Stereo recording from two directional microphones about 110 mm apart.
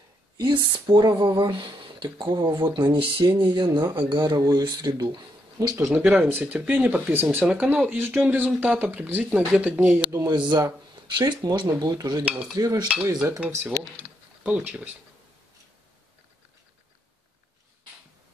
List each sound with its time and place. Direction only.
0.4 s speech: 40° right (ahead or behind)
5.9 s speech: 10° right (ahead or behind)
10.3 s speech: 40° right (ahead or behind)
12.3 s speech: 10° right (ahead or behind)
12.5 s speech: 35° right (ahead or behind)
12.8 s speech: 10° right (ahead or behind)